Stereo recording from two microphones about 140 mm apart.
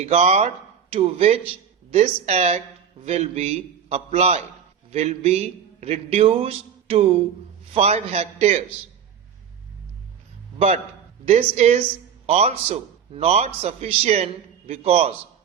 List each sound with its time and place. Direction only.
0.0 s a man's voice: 50° right (ahead or behind)
11.3 s a man's voice: 55° right (ahead or behind)